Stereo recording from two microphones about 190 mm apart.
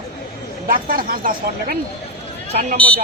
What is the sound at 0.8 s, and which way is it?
Speech, 50° right (ahead or behind).